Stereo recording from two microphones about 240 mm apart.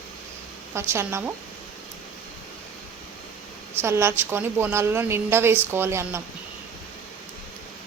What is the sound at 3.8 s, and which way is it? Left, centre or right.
A woman's voice, centre.